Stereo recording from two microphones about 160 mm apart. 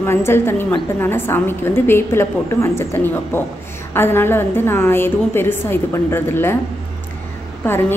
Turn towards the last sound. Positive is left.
turn(degrees=15)  # may be behind; listen again after turning